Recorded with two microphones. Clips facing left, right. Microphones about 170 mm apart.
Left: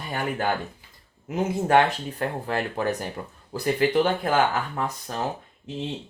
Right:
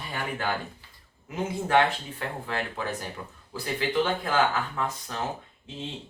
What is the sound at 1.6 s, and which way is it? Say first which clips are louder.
Speech: left 3 dB; 45° left (ahead or behind).